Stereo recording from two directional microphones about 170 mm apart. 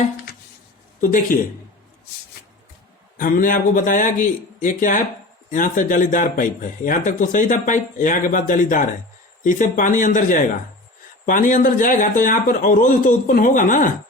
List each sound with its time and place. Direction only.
1.1 s speech: 55° left (ahead or behind)
3.2 s speech: 50° left (ahead or behind)